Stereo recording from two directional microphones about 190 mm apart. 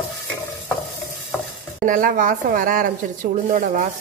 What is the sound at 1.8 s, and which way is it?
A woman's voice, 45° right (ahead or behind).